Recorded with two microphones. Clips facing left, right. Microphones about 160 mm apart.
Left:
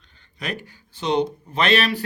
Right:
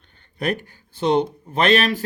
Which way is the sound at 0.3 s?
50° right (ahead or behind).